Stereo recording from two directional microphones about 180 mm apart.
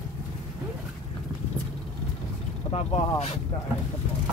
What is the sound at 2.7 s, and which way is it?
Speech, 35° left (ahead or behind).